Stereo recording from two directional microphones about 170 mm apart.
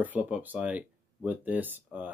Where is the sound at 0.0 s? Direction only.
10° right (ahead or behind).